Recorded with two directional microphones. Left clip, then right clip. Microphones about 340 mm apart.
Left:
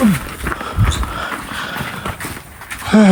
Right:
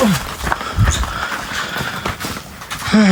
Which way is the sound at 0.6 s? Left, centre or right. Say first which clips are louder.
Right 1 dB; centre.